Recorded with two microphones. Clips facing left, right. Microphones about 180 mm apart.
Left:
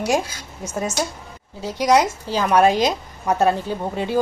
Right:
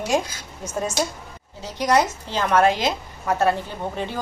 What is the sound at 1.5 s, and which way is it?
A woman's voice, 10° left (ahead or behind).